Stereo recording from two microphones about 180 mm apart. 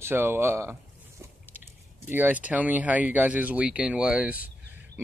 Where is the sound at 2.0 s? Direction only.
10° right (ahead or behind).